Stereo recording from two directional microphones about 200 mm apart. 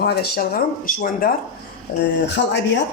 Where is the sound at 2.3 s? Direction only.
60° left (ahead or behind).